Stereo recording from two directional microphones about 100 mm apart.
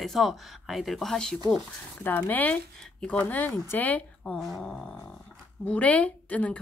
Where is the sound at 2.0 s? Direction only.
20° left (ahead or behind).